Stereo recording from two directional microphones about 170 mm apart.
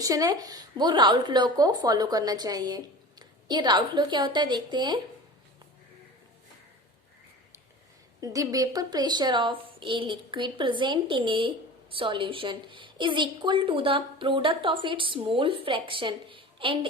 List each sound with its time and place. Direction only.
0.0 s a woman's voice: 20° right (ahead or behind)
8.2 s a woman's voice: 20° right (ahead or behind)